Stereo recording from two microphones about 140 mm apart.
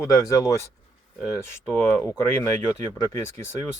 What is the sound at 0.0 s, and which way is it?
Speech, 25° left (ahead or behind).